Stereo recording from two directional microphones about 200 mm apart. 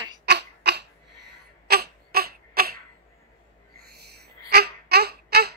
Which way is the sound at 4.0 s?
55° right (ahead or behind).